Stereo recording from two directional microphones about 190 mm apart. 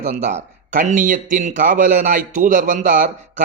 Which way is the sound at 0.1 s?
40° right (ahead or behind).